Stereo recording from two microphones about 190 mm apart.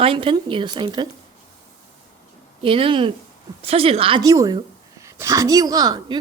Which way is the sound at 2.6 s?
30° right (ahead or behind).